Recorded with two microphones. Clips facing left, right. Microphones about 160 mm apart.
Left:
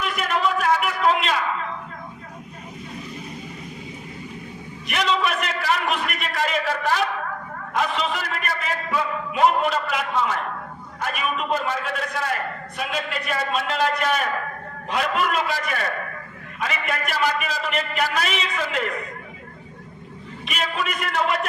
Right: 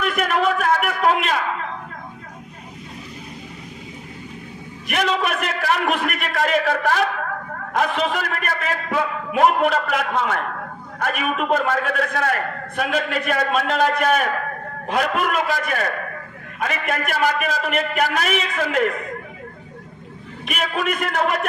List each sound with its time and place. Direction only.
0.0 s a sound: 55° right (ahead or behind)
4.9 s a man's voice: 50° right (ahead or behind)
20.5 s a man's voice: 55° right (ahead or behind)